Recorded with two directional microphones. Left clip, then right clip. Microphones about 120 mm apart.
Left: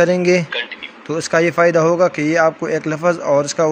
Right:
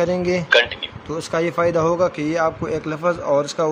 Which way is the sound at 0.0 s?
30° left (ahead or behind).